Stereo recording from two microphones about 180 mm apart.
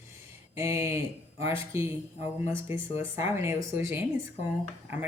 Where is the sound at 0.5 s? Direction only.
15° right (ahead or behind).